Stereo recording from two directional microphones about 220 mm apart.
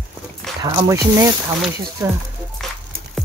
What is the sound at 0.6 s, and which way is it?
Speech, 15° right (ahead or behind).